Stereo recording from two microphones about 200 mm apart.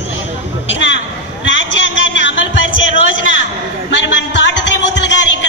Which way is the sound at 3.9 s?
65° left (ahead or behind).